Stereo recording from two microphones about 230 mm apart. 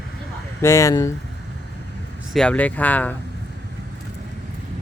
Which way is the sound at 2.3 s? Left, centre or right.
Centre.